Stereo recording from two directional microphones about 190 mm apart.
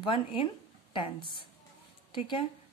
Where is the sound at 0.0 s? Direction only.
25° left (ahead or behind).